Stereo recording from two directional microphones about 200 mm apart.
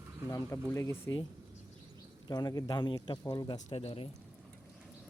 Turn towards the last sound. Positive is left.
turn(degrees=30)  # may be behind; listen again after turning